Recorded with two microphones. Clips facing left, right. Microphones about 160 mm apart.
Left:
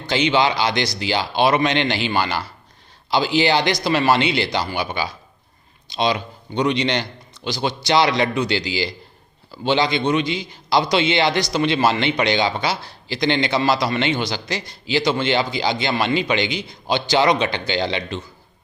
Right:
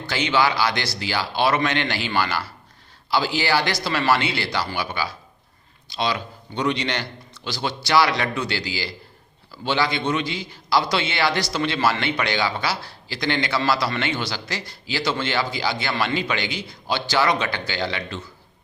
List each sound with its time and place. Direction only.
0.1 s a man's voice: 20° left (ahead or behind)